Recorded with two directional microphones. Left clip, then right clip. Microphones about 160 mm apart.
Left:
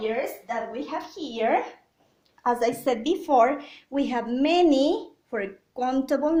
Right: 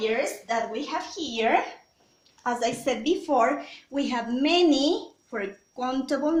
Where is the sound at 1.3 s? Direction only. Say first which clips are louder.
Even; 50° left (ahead or behind).